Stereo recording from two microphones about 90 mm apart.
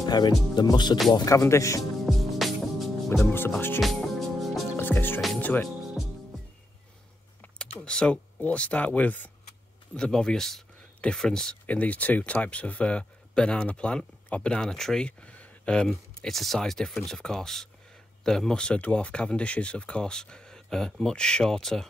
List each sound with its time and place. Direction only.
0.1 s music: 50° left (ahead or behind)
1.1 s speech: 40° left (ahead or behind)
1.8 s music: centre (ahead or behind)
3.1 s speech: 25° left (ahead or behind)
3.8 s music: centre (ahead or behind)
4.7 s music: 20° left (ahead or behind)
7.4 s speech: 10° left (ahead or behind)
9.9 s speech: 5° left (ahead or behind)